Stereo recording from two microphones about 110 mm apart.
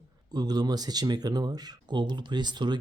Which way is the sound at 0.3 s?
40° right (ahead or behind).